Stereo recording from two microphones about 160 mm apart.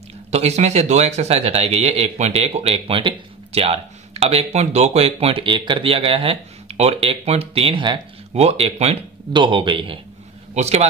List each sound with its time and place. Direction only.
0.3 s speech: 45° right (ahead or behind)
8.3 s speech: 40° right (ahead or behind)
10.5 s a man's voice: 40° right (ahead or behind)